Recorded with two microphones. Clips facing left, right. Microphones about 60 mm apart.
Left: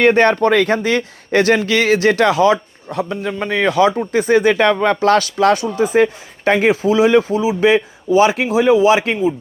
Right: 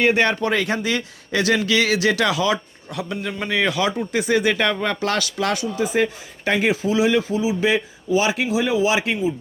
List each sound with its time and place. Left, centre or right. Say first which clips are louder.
0.0 s speech: left 6 dB; left